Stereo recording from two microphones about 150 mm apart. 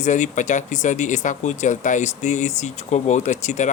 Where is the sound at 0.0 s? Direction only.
55° left (ahead or behind).